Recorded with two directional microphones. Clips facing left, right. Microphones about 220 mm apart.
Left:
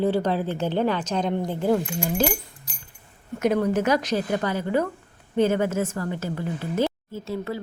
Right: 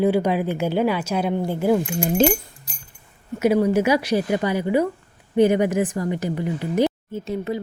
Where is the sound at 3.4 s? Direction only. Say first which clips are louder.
Right 4 dB; 10° right (ahead or behind).